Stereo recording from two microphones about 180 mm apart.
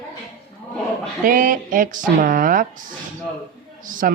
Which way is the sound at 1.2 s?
50° right (ahead or behind).